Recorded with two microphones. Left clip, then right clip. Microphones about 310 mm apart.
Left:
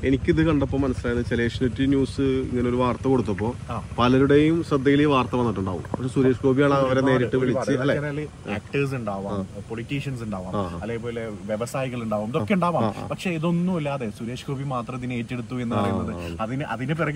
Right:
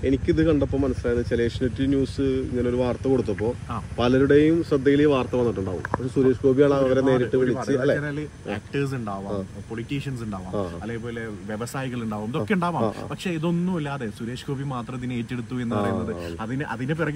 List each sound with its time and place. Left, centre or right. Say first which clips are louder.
0.0 s speech: even; left
8.0 s speech: left 1 dB; centre
11.5 s speech: left 4 dB; centre